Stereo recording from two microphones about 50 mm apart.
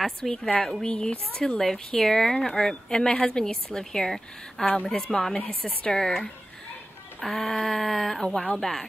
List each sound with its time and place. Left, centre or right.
0.0 s a woman's voice: centre
5.3 s speech: left
5.9 s a woman's voice: centre
8.2 s a woman's voice: centre